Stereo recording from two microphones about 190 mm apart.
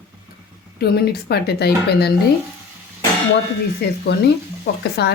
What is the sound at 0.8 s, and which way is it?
Speech, 55° left (ahead or behind).